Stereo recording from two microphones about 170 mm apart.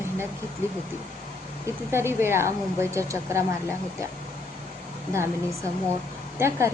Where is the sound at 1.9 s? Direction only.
15° right (ahead or behind).